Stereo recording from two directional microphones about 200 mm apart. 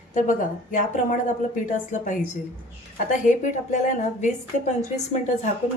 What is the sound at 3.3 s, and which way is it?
A woman's voice, 40° left (ahead or behind).